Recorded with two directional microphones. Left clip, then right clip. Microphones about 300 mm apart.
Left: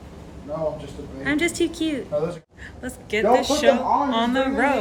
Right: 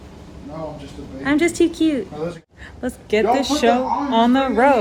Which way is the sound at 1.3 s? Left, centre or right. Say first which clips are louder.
Right 6 dB; right.